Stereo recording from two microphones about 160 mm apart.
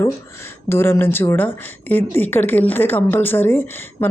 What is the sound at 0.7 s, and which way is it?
Speech, 15° left (ahead or behind).